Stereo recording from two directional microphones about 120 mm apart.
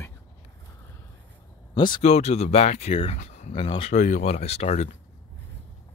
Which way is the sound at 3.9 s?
85° left.